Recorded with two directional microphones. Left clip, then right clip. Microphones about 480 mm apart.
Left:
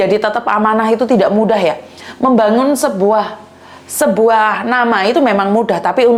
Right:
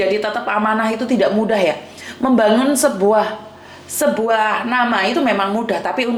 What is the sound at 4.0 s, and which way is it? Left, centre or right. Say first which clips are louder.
A woman's voice: left 5 dB; left.